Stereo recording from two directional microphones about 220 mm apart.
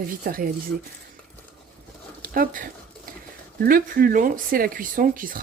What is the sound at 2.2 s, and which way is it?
Speech, 40° right (ahead or behind).